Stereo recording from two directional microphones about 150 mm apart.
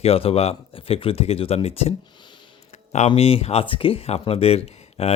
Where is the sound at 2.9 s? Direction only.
45° left (ahead or behind).